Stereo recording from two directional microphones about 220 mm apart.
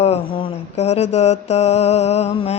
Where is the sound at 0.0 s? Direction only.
25° left (ahead or behind).